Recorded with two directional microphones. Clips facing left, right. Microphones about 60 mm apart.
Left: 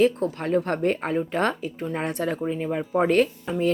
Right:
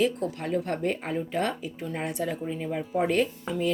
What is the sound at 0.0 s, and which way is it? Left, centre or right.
Speech, left.